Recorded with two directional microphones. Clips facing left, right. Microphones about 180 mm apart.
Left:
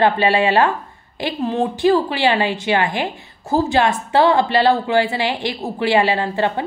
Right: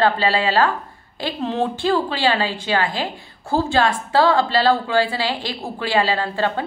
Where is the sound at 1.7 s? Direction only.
15° left (ahead or behind).